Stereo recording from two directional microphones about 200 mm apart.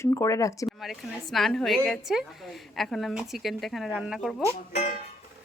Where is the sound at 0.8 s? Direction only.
Centre (ahead or behind).